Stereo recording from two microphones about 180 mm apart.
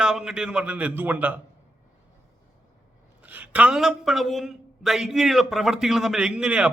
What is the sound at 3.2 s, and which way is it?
Speech, 10° right (ahead or behind).